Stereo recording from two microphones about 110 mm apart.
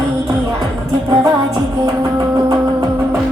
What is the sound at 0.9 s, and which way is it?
Music, 25° right (ahead or behind).